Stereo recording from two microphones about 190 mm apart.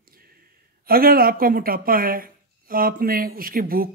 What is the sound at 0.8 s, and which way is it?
Speech, 50° right (ahead or behind).